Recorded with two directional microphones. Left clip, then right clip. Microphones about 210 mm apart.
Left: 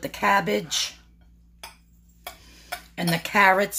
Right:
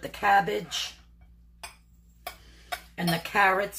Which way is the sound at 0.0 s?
55° left (ahead or behind).